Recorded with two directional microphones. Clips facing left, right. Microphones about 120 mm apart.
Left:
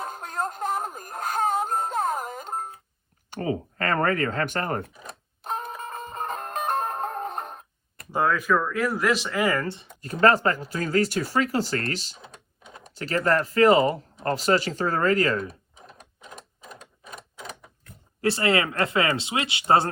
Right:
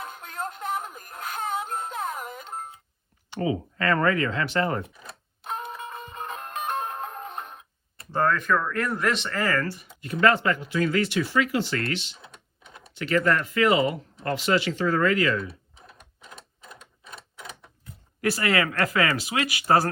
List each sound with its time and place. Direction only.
0.0 s music: 40° left (ahead or behind)
3.2 s speech: 45° left (ahead or behind)
5.0 s music: 40° left (ahead or behind)
8.1 s speech: 10° left (ahead or behind); by 9.9 s 25° left (ahead or behind)
10.0 s speech: 40° left (ahead or behind)
18.2 s speech: 25° left (ahead or behind)